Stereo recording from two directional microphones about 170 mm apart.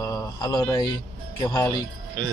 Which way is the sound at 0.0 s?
25° left (ahead or behind).